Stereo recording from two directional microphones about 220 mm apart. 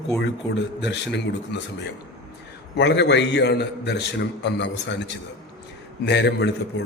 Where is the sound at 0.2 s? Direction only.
55° left (ahead or behind).